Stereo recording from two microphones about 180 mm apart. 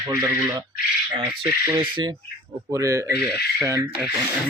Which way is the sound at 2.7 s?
15° right (ahead or behind).